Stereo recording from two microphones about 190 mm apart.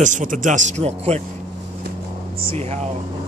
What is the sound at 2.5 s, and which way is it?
Speech, 35° right (ahead or behind).